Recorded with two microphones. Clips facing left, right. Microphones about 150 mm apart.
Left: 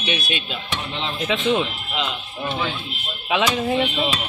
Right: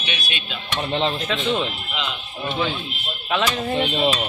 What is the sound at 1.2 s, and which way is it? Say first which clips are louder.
Speech: left 2 dB; 10° left (ahead or behind).